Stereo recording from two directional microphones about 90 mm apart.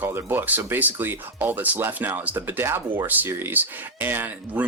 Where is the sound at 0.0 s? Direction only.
25° right (ahead or behind).